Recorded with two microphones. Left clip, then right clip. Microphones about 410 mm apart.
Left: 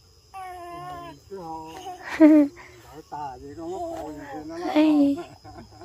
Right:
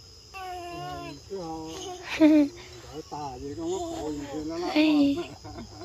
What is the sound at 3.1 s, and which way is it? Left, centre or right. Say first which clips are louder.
Speech: left 2 dB; centre.